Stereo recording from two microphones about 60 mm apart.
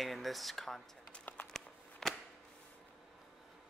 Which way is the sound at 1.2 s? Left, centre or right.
Left.